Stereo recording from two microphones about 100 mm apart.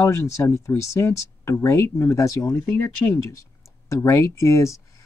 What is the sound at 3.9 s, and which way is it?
Speech, 30° left (ahead or behind).